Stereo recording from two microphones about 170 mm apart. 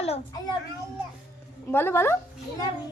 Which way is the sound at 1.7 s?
15° left (ahead or behind).